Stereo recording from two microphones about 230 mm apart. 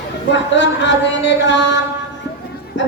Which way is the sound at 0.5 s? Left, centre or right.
Left.